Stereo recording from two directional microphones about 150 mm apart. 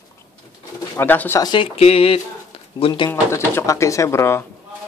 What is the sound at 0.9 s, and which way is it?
Speech, 10° left (ahead or behind).